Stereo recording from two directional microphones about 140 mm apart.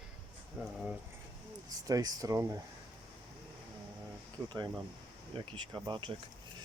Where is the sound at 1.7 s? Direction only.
25° right (ahead or behind).